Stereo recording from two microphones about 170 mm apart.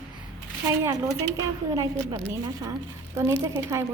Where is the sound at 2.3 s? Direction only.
20° right (ahead or behind).